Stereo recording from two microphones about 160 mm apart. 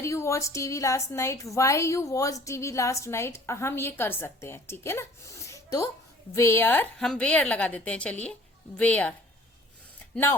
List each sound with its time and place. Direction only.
0.0 s a woman's voice: 20° left (ahead or behind)